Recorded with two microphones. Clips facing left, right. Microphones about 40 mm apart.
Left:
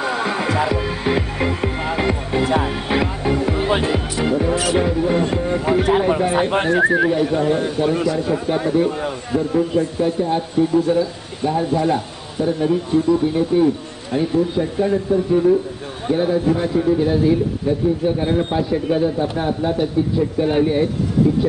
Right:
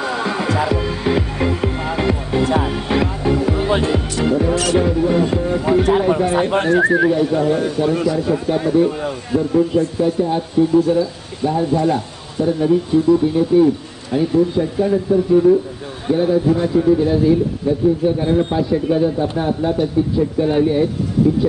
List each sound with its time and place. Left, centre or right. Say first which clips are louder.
0.0 s music: even; centre
2.9 s a man's voice: right 2 dB; centre
17.6 s a man's voice: right 3 dB; centre
20.3 s speech: right 1 dB; centre
21.2 s a man's voice: right 3 dB; centre